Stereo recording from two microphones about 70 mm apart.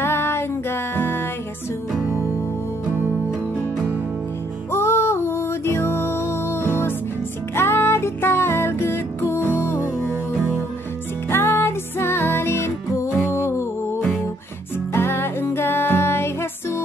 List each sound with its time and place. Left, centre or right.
0.0 s music: left
4.6 s music: left
11.2 s music: left
14.9 s music: left